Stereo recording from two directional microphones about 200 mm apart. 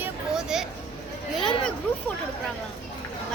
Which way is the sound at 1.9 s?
5° left (ahead or behind).